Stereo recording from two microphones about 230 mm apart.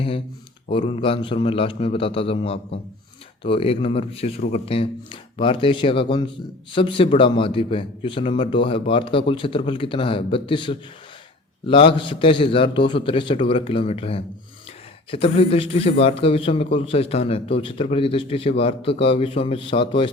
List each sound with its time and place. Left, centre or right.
0.7 s speech: left